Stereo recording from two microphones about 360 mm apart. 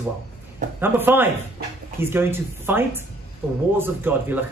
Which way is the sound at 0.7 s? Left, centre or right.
Centre.